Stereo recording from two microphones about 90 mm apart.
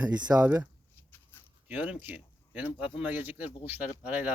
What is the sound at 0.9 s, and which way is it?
Dog, 25° left (ahead or behind).